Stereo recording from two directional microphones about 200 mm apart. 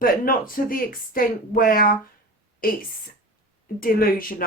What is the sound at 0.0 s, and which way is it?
Speech, 45° left (ahead or behind).